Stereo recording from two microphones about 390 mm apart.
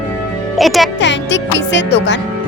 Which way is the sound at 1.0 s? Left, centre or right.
Left.